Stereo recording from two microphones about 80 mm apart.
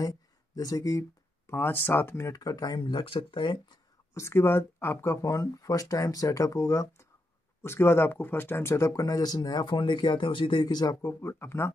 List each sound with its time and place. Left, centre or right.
0.0 s speech: left
1.5 s speech: left
2.3 s speech: left
2.8 s speech: left
4.1 s speech: left
7.6 s speech: left
11.1 s speech: left